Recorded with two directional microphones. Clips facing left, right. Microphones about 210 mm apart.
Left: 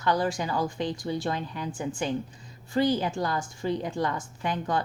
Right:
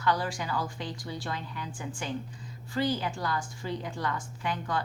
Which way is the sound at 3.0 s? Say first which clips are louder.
Left 4 dB; 25° left (ahead or behind).